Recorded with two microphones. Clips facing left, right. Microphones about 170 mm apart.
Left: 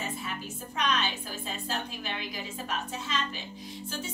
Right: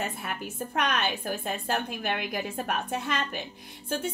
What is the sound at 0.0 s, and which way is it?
A woman's voice, 60° right (ahead or behind).